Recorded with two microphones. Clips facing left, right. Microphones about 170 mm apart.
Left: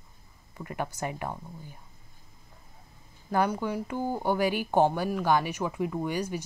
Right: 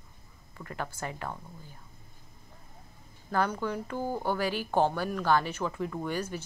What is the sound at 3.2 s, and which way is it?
Speech, 10° left (ahead or behind).